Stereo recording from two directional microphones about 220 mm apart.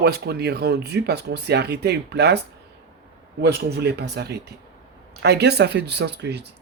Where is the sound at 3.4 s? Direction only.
50° right (ahead or behind).